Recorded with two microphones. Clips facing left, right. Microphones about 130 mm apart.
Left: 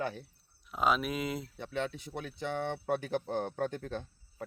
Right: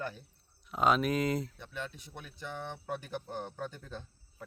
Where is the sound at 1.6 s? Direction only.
80° left.